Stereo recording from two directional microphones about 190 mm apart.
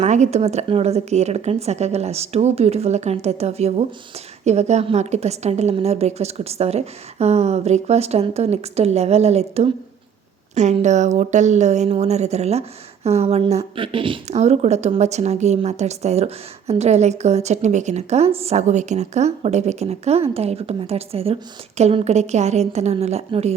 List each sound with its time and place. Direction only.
0.0 s speech: 35° right (ahead or behind)